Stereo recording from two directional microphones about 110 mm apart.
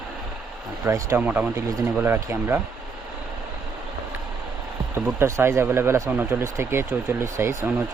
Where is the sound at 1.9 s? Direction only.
20° right (ahead or behind).